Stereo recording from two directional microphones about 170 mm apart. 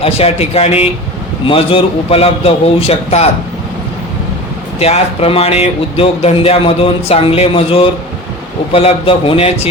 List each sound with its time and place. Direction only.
0.0 s speech: 35° left (ahead or behind)
4.8 s speech: 35° left (ahead or behind)